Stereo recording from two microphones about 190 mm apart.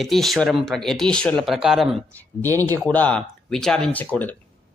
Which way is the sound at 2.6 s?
20° right (ahead or behind).